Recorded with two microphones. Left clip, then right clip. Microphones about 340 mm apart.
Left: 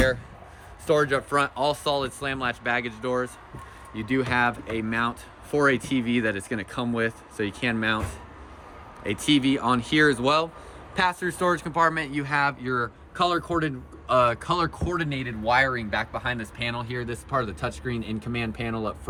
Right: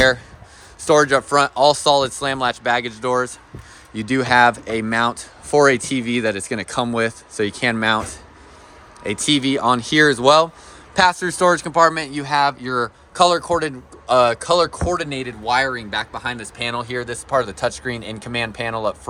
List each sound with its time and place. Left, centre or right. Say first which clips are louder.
0.9 s speech: right 8 dB; centre
9.0 s speech: right 4 dB; centre